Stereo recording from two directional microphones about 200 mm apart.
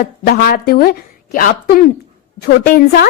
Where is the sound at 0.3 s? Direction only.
50° left (ahead or behind).